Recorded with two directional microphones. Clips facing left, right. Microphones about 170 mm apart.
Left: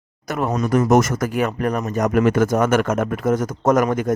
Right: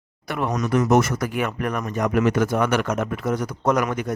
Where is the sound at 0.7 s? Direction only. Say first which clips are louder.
Left 2 dB; 45° left (ahead or behind).